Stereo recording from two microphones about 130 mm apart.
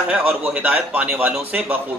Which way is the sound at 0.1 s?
10° right (ahead or behind).